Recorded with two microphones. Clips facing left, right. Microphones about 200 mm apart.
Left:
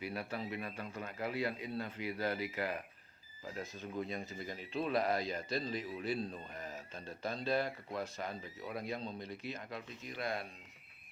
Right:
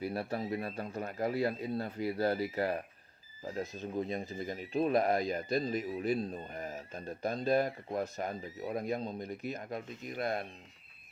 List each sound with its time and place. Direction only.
0.0 s speech: 40° right (ahead or behind)
4.4 s speech: 45° right (ahead or behind)
7.3 s speech: 45° right (ahead or behind)